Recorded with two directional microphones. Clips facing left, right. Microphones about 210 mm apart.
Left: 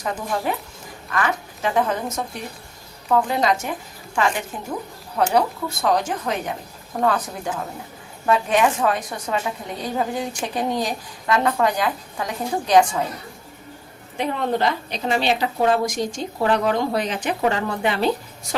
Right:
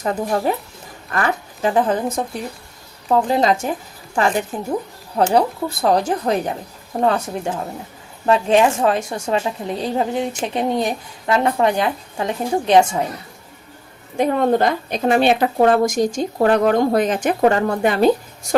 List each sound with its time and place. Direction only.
0.0 s a woman's voice: 40° right (ahead or behind)
14.2 s a woman's voice: 45° right (ahead or behind)